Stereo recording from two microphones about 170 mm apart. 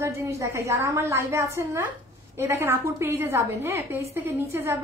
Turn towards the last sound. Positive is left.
turn(degrees=-15)  # may be behind; listen again after turning